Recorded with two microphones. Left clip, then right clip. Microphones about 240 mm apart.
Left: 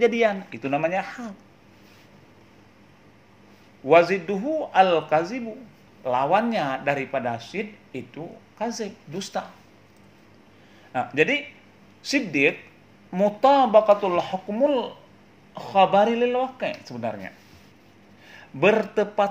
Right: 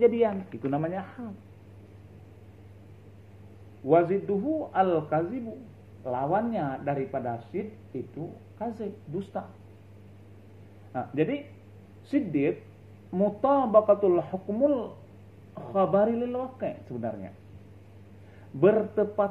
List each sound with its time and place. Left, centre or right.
0.0 s speech: left
3.9 s speech: left
9.4 s speech: left
10.9 s speech: left
18.6 s speech: left